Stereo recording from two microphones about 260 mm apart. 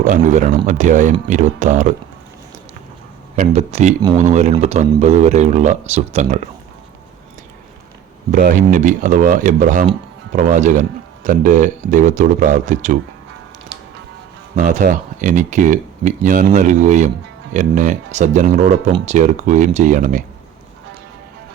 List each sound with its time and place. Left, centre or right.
0.0 s speech: right
3.3 s speech: right
8.3 s speech: right
14.5 s speech: right